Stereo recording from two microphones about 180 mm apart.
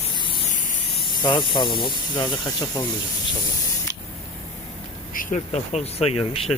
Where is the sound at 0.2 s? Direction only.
30° left (ahead or behind).